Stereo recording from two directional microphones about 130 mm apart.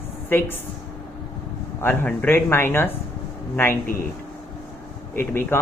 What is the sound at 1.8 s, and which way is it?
Speech, 15° left (ahead or behind).